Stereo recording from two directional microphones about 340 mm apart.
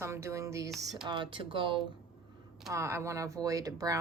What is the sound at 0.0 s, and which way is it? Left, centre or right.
Speech, centre.